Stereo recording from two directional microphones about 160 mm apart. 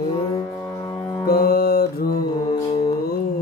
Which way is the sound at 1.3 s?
70° left (ahead or behind).